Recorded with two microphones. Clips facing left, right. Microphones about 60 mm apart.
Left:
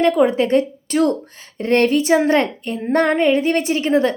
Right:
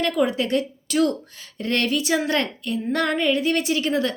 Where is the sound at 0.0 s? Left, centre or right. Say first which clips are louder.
Left 7 dB; left.